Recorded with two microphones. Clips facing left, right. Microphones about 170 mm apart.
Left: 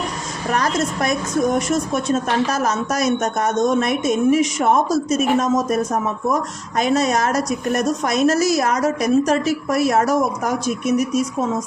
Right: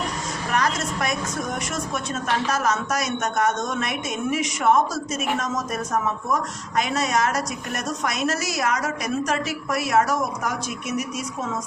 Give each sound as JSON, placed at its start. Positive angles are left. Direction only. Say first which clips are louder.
{"t": 0.5, "sound": "a woman's voice", "louder": "left 4 dB", "side_deg": 40}